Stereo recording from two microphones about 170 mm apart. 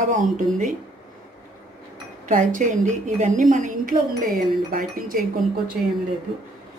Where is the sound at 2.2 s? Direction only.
50° right (ahead or behind).